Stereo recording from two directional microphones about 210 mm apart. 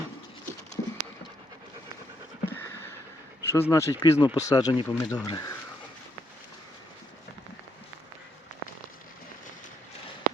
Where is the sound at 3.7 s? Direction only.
15° left (ahead or behind).